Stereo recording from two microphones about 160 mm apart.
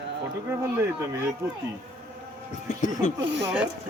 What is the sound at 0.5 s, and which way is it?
Speech, 15° right (ahead or behind).